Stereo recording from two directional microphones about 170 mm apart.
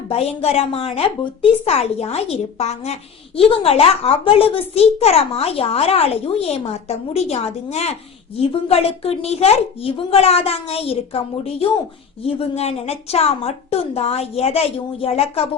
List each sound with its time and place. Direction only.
0.1 s a woman's voice: 35° left (ahead or behind)